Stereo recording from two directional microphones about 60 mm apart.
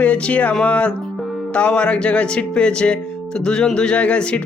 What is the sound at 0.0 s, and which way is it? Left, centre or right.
Speech, left.